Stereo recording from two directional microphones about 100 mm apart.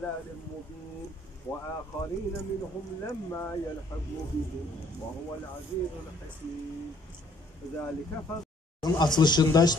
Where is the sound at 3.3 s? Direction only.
25° left (ahead or behind).